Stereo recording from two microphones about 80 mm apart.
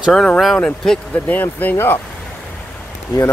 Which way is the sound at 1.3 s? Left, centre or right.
Left.